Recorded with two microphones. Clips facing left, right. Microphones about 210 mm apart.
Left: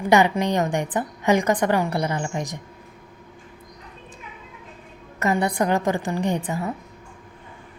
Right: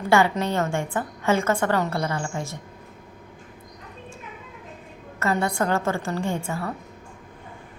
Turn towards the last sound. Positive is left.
turn(degrees=20)  # may be behind; listen again after turning